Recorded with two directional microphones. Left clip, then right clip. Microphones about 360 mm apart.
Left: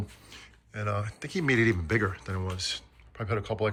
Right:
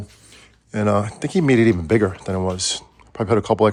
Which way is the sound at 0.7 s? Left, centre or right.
Centre.